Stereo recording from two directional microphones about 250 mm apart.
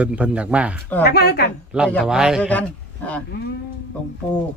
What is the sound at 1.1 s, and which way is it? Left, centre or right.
Speech, left.